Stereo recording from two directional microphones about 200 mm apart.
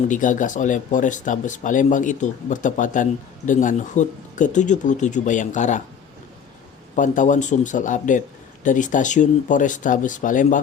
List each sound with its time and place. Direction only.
0.1 s speech: 40° left (ahead or behind)
6.9 s speech: 40° left (ahead or behind)